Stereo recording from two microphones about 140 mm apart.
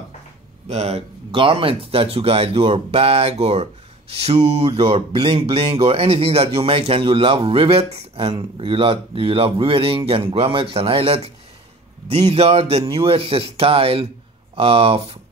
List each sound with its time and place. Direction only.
0.7 s speech: 50° right (ahead or behind)